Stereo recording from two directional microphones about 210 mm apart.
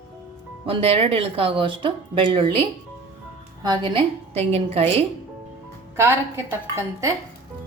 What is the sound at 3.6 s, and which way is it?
Speech, 20° right (ahead or behind).